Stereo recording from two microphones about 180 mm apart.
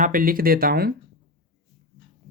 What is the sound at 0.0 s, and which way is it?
Speech, 50° right (ahead or behind).